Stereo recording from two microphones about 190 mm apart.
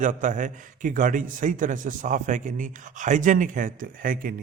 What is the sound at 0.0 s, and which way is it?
Speech, 40° right (ahead or behind).